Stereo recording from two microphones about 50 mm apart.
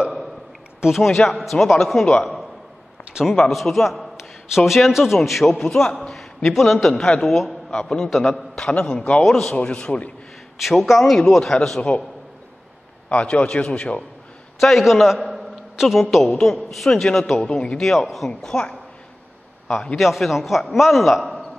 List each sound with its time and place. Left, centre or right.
0.9 s a man's voice: centre
3.5 s a man's voice: centre
6.0 s a sound: centre
6.5 s a man's voice: centre
8.7 s a man's voice: left
9.2 s a man's voice: centre; by 10.1 s left
10.6 s a man's voice: centre
13.1 s a man's voice: left
14.6 s a man's voice: centre
14.9 s a sound: centre
16.0 s a man's voice: centre
17.7 s a man's voice: centre
18.3 s a man's voice: centre
20.0 s a man's voice: centre